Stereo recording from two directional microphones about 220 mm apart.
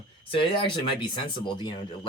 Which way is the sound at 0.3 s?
25° left (ahead or behind).